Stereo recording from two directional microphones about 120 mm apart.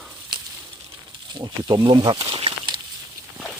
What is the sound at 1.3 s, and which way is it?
Speech, 35° right (ahead or behind).